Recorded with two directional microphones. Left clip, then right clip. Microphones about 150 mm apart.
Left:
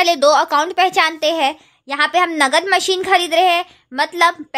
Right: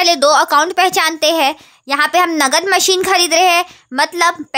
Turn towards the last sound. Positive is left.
turn(degrees=-30)  # may be behind; listen again after turning